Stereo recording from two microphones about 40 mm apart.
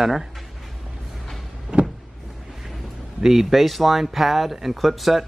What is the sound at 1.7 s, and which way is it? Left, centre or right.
Power windows, right.